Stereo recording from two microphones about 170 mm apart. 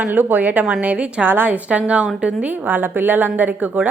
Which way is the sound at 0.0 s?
10° right (ahead or behind).